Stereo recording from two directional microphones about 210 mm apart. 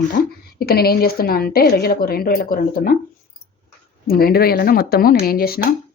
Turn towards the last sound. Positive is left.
turn(degrees=45)  # may be behind; listen again after turning